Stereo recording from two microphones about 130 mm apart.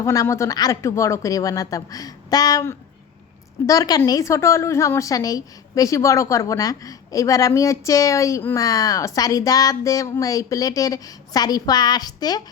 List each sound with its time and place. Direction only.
0.0 s a woman's voice: 25° left (ahead or behind)